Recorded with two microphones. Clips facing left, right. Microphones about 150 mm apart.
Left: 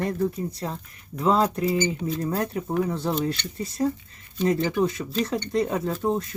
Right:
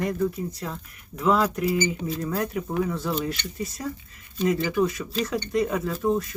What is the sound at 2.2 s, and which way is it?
Speech, 30° left (ahead or behind).